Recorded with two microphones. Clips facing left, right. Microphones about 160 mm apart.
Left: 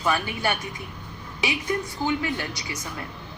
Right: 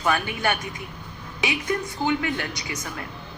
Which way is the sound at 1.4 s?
30° left (ahead or behind).